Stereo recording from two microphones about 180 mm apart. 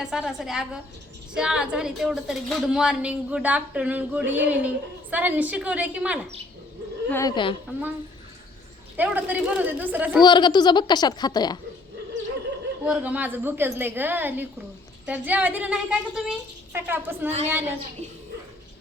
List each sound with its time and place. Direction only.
0.0 s a woman's voice: 5° right (ahead or behind)
7.1 s a woman's voice: 15° left (ahead or behind)
9.0 s a woman's voice: 10° right (ahead or behind)
10.2 s a child's voice: 25° left (ahead or behind)
12.1 s a sound: 90° right
12.8 s a woman's voice: 10° right (ahead or behind)